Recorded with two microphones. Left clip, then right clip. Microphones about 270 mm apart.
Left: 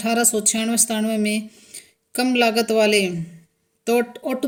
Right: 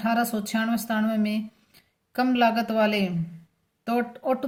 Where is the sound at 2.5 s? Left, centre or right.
Centre.